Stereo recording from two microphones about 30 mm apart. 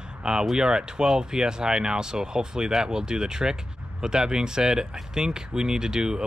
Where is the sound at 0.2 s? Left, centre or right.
Right.